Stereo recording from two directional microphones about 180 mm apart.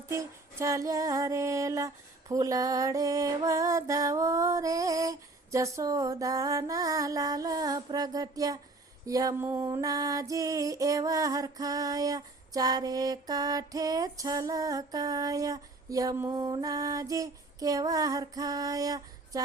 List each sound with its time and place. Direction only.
0.1 s music: 15° right (ahead or behind)